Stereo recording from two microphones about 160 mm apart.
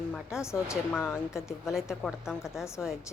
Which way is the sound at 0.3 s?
15° left (ahead or behind).